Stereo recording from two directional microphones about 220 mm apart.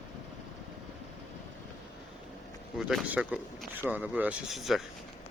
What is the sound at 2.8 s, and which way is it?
Speech, centre (ahead or behind).